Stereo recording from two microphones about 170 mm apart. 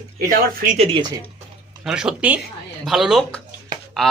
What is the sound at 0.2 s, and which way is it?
Speech, 55° right (ahead or behind).